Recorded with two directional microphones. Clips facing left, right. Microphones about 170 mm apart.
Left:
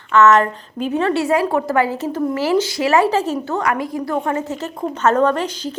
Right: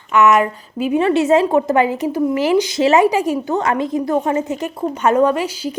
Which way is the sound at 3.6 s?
25° right (ahead or behind).